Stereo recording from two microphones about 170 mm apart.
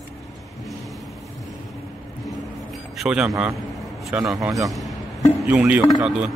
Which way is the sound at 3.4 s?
Centre (ahead or behind).